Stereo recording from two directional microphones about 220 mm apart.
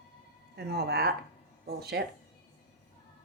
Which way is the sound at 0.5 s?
45° right (ahead or behind).